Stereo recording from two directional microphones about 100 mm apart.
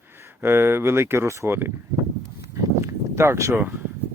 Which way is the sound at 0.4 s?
25° right (ahead or behind).